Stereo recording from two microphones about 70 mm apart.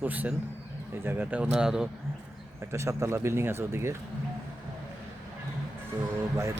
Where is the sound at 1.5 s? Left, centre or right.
Centre.